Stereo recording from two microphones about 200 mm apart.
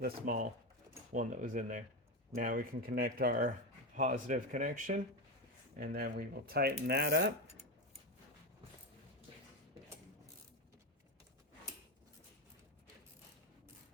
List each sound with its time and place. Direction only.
0.0 s speech: 45° right (ahead or behind)